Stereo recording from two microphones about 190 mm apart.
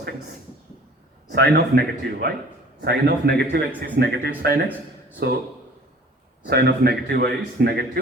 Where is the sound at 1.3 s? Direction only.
55° right (ahead or behind).